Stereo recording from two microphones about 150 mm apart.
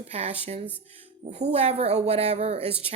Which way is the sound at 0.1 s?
45° right (ahead or behind).